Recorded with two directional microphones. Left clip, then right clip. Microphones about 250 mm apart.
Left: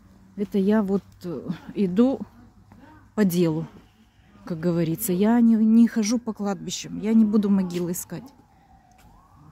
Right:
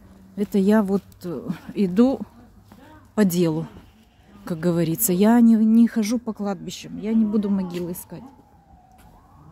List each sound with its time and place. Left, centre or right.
0.4 s a woman's voice: centre